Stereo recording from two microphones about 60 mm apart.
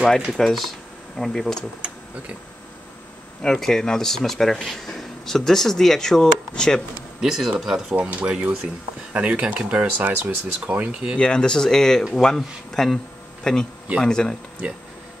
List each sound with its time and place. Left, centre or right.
0.3 s speech: centre
3.4 s speech: centre
7.2 s speech: centre
7.9 s speech: right
11.1 s speech: centre